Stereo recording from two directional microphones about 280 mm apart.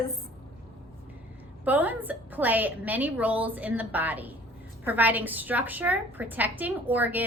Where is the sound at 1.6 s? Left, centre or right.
Centre.